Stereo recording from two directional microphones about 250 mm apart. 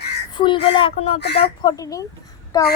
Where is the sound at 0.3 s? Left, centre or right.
Centre.